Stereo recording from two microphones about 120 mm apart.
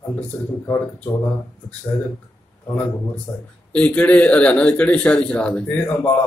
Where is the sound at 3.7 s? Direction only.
10° left (ahead or behind).